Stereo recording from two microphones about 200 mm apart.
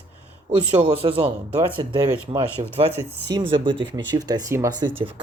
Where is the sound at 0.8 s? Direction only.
25° right (ahead or behind).